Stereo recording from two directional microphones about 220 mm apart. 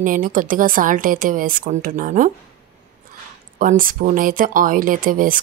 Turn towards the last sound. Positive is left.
turn(degrees=-40)  # may be behind; listen again after turning